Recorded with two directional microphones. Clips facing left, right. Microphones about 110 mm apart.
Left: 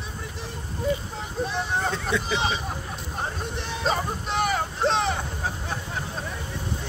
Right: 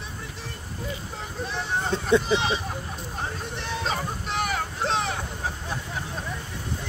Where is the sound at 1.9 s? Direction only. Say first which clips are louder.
Right 5 dB; 30° right (ahead or behind).